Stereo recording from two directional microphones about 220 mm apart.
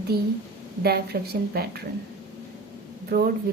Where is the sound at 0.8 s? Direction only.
45° right (ahead or behind).